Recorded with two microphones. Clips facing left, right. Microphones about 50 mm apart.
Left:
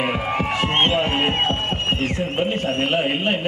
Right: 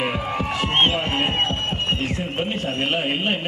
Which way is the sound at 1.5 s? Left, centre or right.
Left.